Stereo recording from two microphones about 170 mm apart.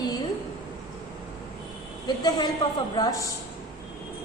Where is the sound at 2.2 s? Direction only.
25° left (ahead or behind).